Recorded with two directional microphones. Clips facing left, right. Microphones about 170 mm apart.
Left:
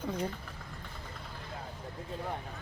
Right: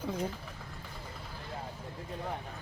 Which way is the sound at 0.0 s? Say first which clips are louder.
Even; 5° right (ahead or behind).